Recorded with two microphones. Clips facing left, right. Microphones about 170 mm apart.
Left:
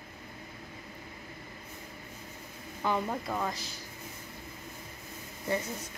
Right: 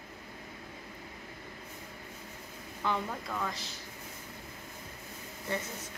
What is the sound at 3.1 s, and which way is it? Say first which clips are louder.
Speech: left 4 dB; 30° left (ahead or behind).